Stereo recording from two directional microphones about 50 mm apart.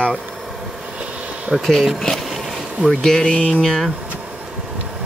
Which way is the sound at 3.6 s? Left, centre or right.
Centre.